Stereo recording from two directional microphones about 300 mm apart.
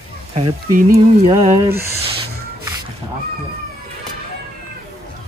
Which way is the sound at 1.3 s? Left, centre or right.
Centre.